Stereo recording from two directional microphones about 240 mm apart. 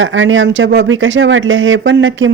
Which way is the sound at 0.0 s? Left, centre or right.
Right.